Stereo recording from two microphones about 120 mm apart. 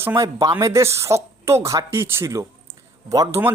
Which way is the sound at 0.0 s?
20° right (ahead or behind).